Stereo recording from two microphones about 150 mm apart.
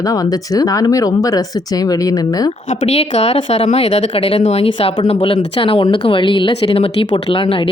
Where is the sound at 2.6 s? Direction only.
50° left (ahead or behind).